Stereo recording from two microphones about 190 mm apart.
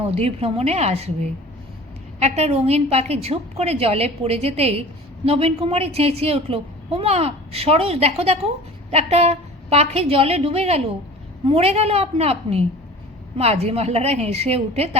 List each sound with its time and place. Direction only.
0.0 s a woman's voice: 30° right (ahead or behind)